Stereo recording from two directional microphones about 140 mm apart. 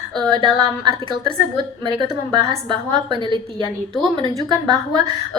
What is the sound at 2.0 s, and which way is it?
A woman's voice, 35° right (ahead or behind).